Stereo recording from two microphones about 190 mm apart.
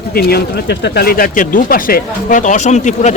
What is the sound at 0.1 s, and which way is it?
Speech, 55° left (ahead or behind).